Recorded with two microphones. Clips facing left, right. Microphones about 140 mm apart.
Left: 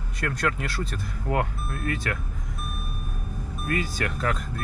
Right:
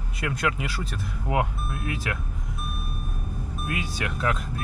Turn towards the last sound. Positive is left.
turn(degrees=-5)  # may be behind; listen again after turning